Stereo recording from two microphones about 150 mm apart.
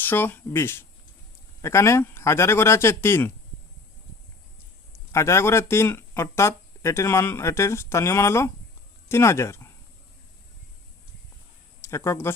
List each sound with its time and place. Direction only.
0.0 s speech: 15° left (ahead or behind)
4.9 s speech: 20° left (ahead or behind)
11.8 s speech: 20° left (ahead or behind)